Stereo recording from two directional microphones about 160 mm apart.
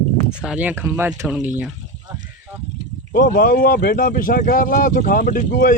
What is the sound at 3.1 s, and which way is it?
Speech, 60° left (ahead or behind).